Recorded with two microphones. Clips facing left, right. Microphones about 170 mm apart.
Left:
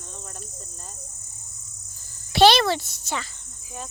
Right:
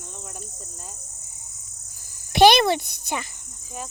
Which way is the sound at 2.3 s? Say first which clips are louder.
Right 1 dB; 15° right (ahead or behind).